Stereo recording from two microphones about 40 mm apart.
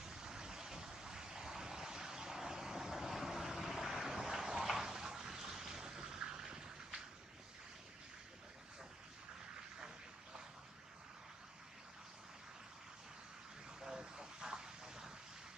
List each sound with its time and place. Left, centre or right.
0.0 s vehicle: centre
13.8 s vehicle: centre